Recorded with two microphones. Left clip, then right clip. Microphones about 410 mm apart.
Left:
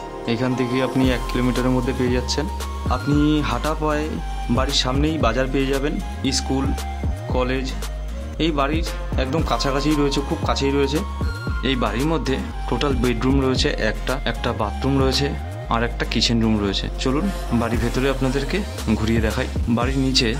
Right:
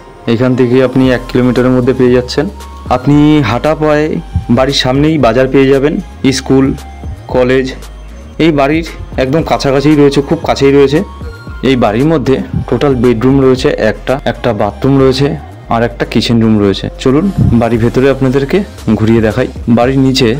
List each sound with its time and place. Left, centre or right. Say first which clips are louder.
0.2 s speech: right 13 dB; left